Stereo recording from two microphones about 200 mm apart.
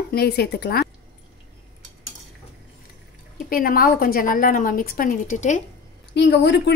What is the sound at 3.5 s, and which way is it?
A woman's voice, 45° left (ahead or behind).